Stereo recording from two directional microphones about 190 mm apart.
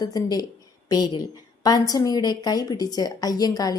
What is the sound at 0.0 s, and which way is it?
A woman's voice, 20° left (ahead or behind).